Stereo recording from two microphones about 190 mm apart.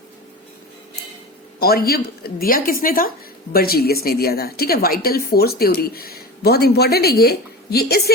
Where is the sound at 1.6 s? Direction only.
55° left (ahead or behind).